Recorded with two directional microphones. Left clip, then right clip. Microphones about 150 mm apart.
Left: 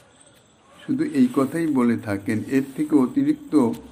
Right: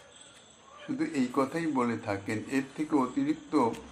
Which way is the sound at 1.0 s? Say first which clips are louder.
Left 8 dB; 55° left (ahead or behind).